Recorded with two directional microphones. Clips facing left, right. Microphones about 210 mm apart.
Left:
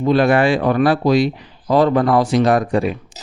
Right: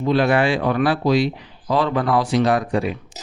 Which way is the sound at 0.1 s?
45° left (ahead or behind).